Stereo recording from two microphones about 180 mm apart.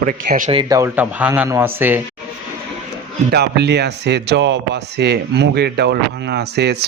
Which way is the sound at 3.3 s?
65° right (ahead or behind).